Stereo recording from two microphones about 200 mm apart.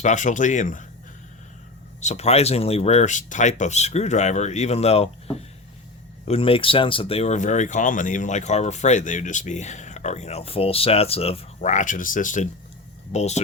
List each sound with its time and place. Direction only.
0.0 s speech: 40° left (ahead or behind)
2.0 s speech: 35° left (ahead or behind)
6.2 s speech: 30° left (ahead or behind)